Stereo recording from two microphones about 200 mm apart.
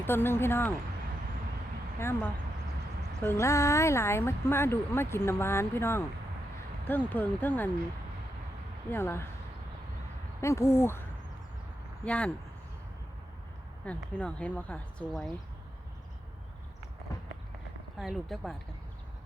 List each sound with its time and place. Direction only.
0.0 s speech: 10° left (ahead or behind)
2.0 s speech: 10° left (ahead or behind)
7.1 s speech: 10° left (ahead or behind)
8.9 s speech: 10° left (ahead or behind)
10.4 s speech: 15° left (ahead or behind)
12.0 s speech: 5° left (ahead or behind)
13.8 s speech: 5° left (ahead or behind)
17.9 s speech: centre (ahead or behind)